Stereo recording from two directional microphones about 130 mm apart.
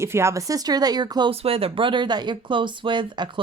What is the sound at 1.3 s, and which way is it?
Speech, 50° right (ahead or behind).